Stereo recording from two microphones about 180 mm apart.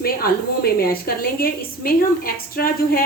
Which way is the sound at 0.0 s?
55° left (ahead or behind).